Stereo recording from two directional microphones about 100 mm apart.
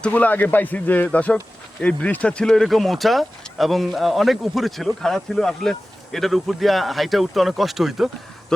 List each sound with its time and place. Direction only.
0.0 s a man's voice: 15° left (ahead or behind); by 8.1 s 5° right (ahead or behind)